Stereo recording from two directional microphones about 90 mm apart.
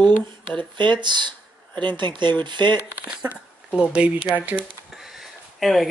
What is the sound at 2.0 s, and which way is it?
Speech, 60° right (ahead or behind).